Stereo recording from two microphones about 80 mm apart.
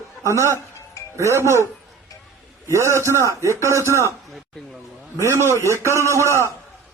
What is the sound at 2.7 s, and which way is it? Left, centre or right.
A man's voice, right.